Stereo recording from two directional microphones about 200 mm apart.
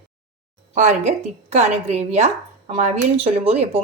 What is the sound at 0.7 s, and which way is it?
A woman's voice, 35° right (ahead or behind).